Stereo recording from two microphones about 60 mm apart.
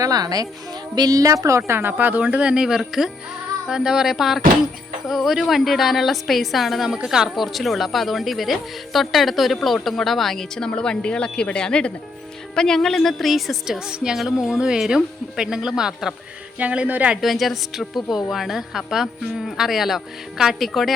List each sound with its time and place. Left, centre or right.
0.0 s a woman's voice: right
1.0 s a woman's voice: right
1.9 s a woman's voice: right; by 16.1 s centre
16.6 s speech: right
17.2 s a woman's voice: centre